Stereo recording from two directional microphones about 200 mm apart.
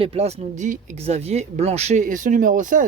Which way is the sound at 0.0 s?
30° right (ahead or behind).